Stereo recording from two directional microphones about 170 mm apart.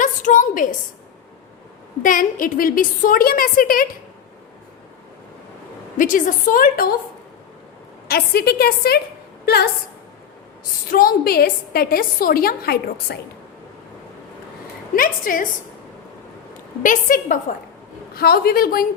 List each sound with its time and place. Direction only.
0.0 s a sound: 50° left (ahead or behind)
2.0 s a woman's voice: 55° left (ahead or behind)
6.0 s a woman's voice: 50° left (ahead or behind)
8.0 s a woman's voice: 65° left (ahead or behind)
10.8 s a woman's voice: 55° left (ahead or behind)
14.9 s a woman's voice: 55° left (ahead or behind)
16.8 s a woman's voice: 50° left (ahead or behind)
18.1 s a woman's voice: 65° left (ahead or behind)